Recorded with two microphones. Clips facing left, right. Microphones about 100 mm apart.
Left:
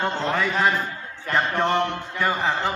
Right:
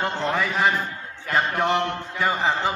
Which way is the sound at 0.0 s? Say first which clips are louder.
Left 1 dB; 5° right (ahead or behind).